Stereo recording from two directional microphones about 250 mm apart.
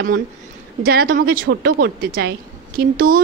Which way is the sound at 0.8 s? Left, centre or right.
Right.